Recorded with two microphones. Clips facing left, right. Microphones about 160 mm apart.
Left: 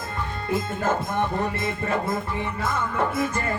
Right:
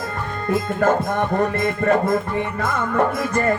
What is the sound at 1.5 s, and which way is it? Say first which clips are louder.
Music: right 8 dB; 50° right (ahead or behind).